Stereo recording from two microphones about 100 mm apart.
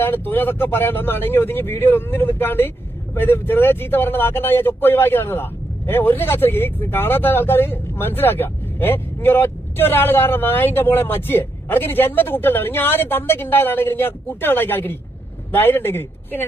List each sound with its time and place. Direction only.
0.0 s speech: 20° left (ahead or behind)